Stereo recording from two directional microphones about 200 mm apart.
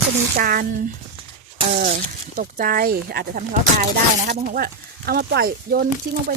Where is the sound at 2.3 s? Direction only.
45° right (ahead or behind).